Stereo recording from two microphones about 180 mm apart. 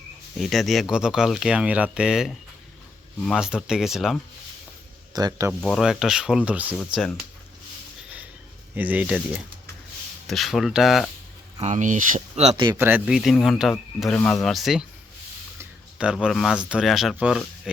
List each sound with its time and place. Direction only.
0.3 s speech: centre (ahead or behind)
5.1 s speech: 20° right (ahead or behind)
5.5 s speech: centre (ahead or behind)
6.7 s speech: 5° left (ahead or behind)
8.7 s speech: 10° right (ahead or behind)
11.6 s speech: 45° right (ahead or behind)
12.7 s speech: 10° right (ahead or behind)
16.1 s speech: centre (ahead or behind)